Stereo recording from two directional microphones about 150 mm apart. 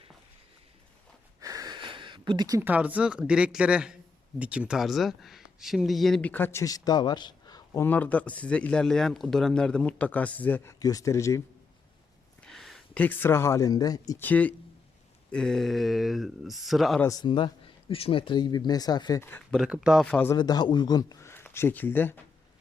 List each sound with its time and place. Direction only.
1.4 s a sound: 25° right (ahead or behind)
2.6 s speech: 10° right (ahead or behind); by 11.4 s 20° left (ahead or behind)
12.4 s speech: centre (ahead or behind); by 14.3 s 25° left (ahead or behind)
14.3 s speech: 10° left (ahead or behind)
17.0 s speech: 25° left (ahead or behind)
19.2 s speech: 15° left (ahead or behind)
19.5 s speech: 5° right (ahead or behind)
20.3 s speech: 30° left (ahead or behind); by 22.2 s 15° left (ahead or behind)